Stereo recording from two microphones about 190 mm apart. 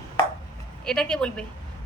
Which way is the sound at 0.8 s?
5° left (ahead or behind).